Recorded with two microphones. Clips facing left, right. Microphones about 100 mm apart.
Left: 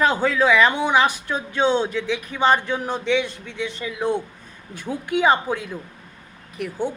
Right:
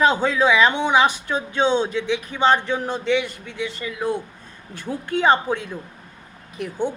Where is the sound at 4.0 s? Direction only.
20° left (ahead or behind); by 5.8 s 5° left (ahead or behind).